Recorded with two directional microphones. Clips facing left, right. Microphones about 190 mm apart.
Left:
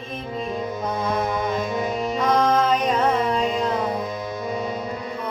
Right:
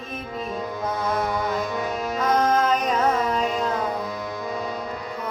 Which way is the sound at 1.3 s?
20° left (ahead or behind).